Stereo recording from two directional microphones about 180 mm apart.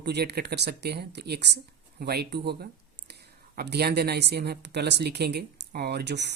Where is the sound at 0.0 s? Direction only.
65° right (ahead or behind).